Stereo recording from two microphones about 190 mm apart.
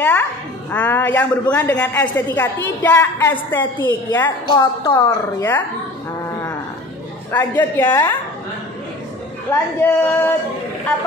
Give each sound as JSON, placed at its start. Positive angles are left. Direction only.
{"t": 0.0, "sound": "a woman's voice", "side_deg": 10}
{"t": 4.5, "sound": "a woman's voice", "side_deg": 20}
{"t": 4.9, "sound": "a woman's voice", "side_deg": 10}
{"t": 7.2, "sound": "a woman's voice", "side_deg": 10}
{"t": 9.5, "sound": "a woman's voice", "side_deg": 10}